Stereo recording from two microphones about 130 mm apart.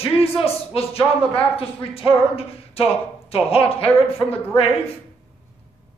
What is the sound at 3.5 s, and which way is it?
Speech, 50° left (ahead or behind).